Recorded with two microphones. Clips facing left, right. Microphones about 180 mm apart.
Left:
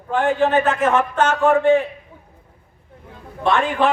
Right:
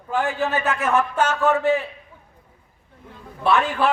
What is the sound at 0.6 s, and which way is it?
A man's voice, 10° right (ahead or behind).